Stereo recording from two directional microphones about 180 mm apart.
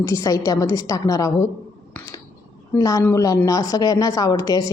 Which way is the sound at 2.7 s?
20° left (ahead or behind).